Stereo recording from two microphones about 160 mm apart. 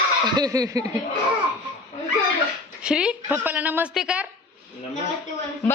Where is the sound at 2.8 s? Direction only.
5° right (ahead or behind).